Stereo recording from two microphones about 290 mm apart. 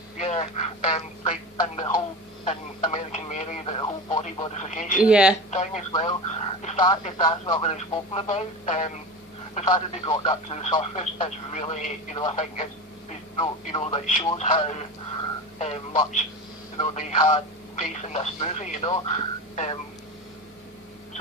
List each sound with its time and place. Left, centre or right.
0.2 s speech: left
2.4 s radio: centre
5.0 s a woman's voice: centre
5.5 s speech: left